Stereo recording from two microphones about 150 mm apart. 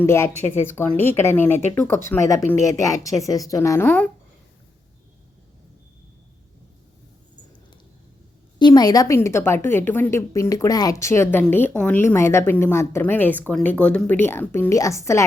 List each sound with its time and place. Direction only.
0.0 s a woman's voice: 15° left (ahead or behind)
8.5 s a woman's voice: 30° left (ahead or behind)